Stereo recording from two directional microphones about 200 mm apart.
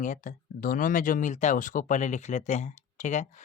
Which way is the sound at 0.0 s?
40° left (ahead or behind).